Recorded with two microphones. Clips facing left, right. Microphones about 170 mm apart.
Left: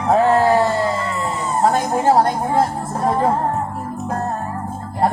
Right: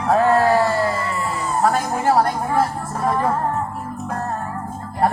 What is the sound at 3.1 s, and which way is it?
Music, 25° left (ahead or behind).